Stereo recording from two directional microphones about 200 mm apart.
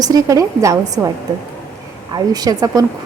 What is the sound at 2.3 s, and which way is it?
Speech, 20° right (ahead or behind).